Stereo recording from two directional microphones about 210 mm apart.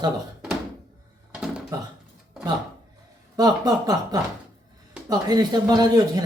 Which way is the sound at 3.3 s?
20° right (ahead or behind).